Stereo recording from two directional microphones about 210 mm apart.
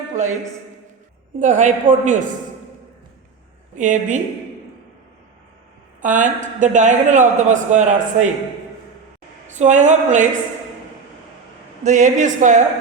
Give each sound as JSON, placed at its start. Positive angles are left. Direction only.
{"t": 0.1, "sound": "a man's voice", "side_deg": -35}
{"t": 1.4, "sound": "a man's voice", "side_deg": -35}
{"t": 3.8, "sound": "a man's voice", "side_deg": -35}
{"t": 6.0, "sound": "a woman's voice", "side_deg": -35}
{"t": 9.5, "sound": "a man's voice", "side_deg": -35}
{"t": 11.8, "sound": "a man's voice", "side_deg": -35}